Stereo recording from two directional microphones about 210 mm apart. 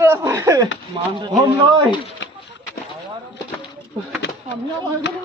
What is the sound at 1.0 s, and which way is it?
Speech, 20° right (ahead or behind).